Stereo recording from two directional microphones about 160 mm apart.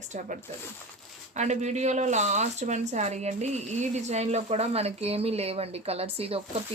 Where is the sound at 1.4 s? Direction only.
45° right (ahead or behind).